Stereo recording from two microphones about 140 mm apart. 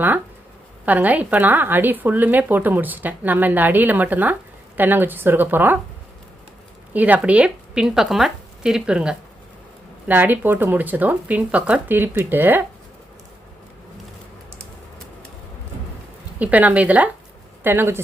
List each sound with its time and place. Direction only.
0.9 s a woman's voice: 10° right (ahead or behind)
6.9 s a woman's voice: 10° right (ahead or behind)
16.4 s a woman's voice: 10° right (ahead or behind)